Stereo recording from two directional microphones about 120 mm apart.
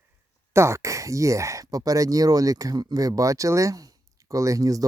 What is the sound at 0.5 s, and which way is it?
Speech, 25° right (ahead or behind).